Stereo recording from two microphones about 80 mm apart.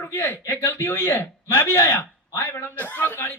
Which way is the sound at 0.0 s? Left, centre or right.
Left.